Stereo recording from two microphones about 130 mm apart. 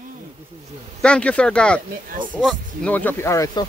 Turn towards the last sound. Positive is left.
turn(degrees=20)  # may be behind; listen again after turning